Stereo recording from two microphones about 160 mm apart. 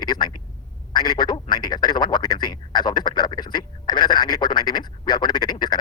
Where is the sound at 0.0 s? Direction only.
25° left (ahead or behind).